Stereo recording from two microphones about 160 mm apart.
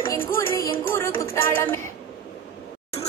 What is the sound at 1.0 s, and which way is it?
Music, 15° left (ahead or behind).